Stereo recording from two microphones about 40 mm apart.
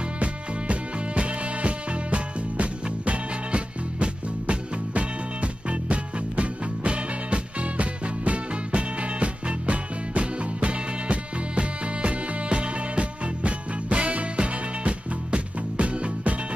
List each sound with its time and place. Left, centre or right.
0.2 s music: right